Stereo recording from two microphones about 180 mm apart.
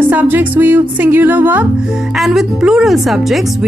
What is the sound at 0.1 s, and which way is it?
Speech, 10° right (ahead or behind).